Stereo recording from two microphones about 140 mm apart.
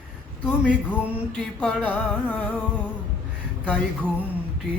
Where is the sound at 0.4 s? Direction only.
10° left (ahead or behind).